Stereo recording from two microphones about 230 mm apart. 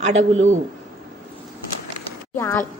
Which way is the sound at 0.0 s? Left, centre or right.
Right.